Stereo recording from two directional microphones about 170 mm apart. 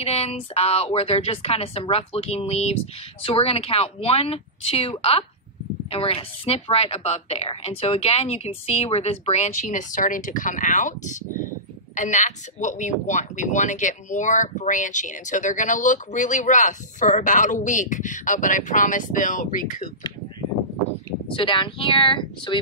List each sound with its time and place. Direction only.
0.0 s a woman's voice: 35° left (ahead or behind)
21.4 s speech: 30° left (ahead or behind)